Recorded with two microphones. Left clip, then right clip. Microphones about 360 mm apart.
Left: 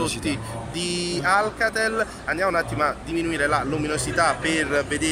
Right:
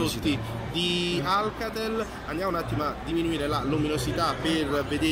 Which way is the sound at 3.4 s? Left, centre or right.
Left.